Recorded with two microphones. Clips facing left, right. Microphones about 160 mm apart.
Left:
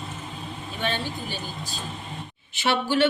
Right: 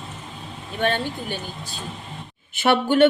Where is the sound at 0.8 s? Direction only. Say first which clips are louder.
Right 6 dB; 55° right (ahead or behind).